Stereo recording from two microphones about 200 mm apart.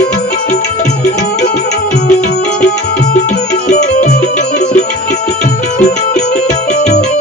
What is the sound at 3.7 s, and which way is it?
Music, 35° left (ahead or behind).